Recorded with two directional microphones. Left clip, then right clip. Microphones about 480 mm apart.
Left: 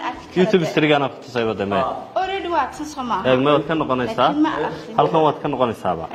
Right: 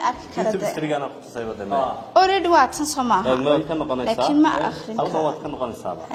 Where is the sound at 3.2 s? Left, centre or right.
Centre.